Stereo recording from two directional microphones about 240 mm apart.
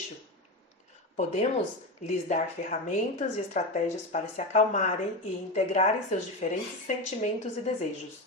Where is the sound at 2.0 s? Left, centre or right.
Left.